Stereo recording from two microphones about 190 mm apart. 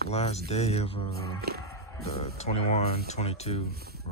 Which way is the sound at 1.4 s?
55° right (ahead or behind).